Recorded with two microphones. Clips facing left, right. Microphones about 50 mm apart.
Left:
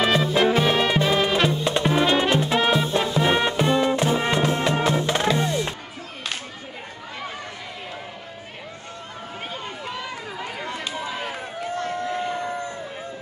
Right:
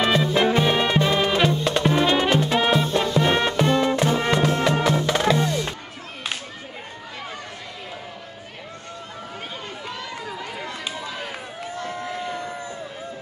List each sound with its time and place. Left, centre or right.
0.0 s music: centre; by 5.8 s left
11.2 s run: left